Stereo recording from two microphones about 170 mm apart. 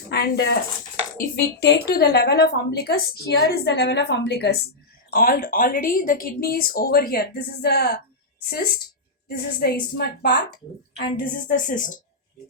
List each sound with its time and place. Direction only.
0.1 s a woman's voice: 70° left (ahead or behind)
5.1 s speech: 55° left (ahead or behind)
11.2 s speech: 50° left (ahead or behind)